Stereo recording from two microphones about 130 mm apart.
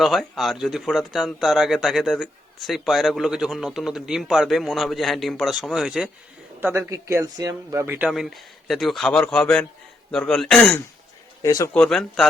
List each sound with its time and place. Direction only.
0.0 s speech: centre (ahead or behind)
6.6 s speech: 20° right (ahead or behind)
8.1 s speech: centre (ahead or behind)
11.4 s speech: 25° left (ahead or behind)
11.7 s speech: 5° left (ahead or behind)